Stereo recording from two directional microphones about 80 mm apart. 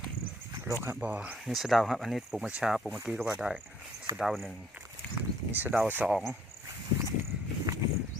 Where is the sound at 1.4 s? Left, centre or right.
Centre.